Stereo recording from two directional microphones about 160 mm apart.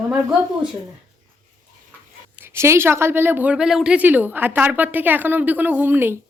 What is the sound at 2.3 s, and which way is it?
Speech, 15° right (ahead or behind).